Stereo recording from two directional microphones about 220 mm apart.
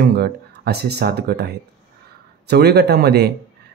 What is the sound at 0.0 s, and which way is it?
Speech, 45° right (ahead or behind).